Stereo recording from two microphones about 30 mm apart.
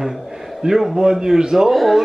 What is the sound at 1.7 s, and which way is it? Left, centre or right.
Speech, centre.